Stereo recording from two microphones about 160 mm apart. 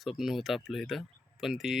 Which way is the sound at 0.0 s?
Centre (ahead or behind).